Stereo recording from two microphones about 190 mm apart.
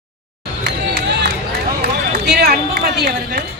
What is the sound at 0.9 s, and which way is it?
Crowd, 60° right (ahead or behind).